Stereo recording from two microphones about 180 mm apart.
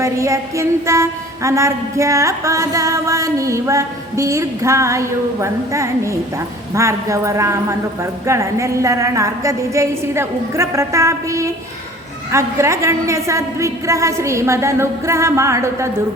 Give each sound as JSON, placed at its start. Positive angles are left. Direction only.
{"t": 0.0, "sound": "mantra", "side_deg": -15}